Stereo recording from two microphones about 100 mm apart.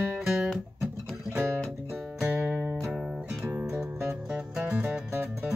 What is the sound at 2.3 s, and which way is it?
Music, 15° right (ahead or behind).